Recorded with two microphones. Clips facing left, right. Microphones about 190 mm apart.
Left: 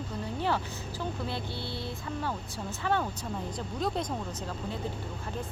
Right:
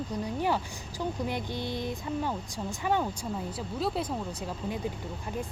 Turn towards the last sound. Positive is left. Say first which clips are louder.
# right 1 dB
turn(degrees=-5)  # may be behind; listen again after turning